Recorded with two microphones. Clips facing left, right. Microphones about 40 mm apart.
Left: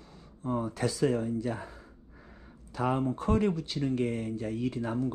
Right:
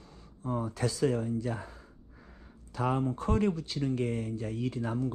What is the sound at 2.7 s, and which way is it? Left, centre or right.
Speech, left.